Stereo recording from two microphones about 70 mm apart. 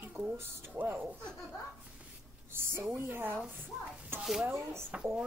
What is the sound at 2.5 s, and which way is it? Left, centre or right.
Speech, right.